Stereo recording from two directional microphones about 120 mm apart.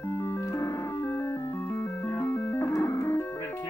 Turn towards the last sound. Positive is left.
turn(degrees=20)  # may be behind; listen again after turning